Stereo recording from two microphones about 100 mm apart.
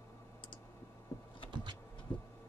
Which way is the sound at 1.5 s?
50° right (ahead or behind).